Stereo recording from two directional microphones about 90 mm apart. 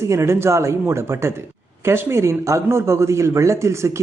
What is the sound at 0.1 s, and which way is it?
Speech, 30° right (ahead or behind).